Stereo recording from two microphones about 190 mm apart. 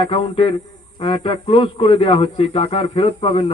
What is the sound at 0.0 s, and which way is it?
A man's voice, 30° left (ahead or behind).